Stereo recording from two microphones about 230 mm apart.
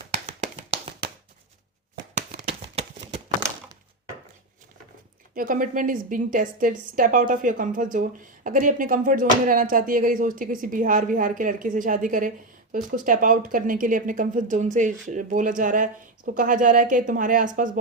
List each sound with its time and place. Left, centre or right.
0.3 s tap: right
2.1 s a sound: right
5.3 s a woman's voice: right